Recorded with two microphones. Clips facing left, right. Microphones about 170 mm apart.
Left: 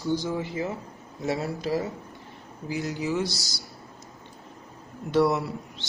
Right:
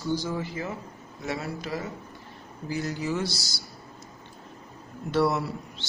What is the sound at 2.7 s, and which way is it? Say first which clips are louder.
Speech: left 1 dB; 20° left (ahead or behind).